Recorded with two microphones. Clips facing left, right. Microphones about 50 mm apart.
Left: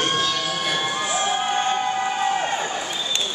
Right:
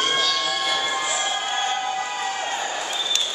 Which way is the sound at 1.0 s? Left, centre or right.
Left.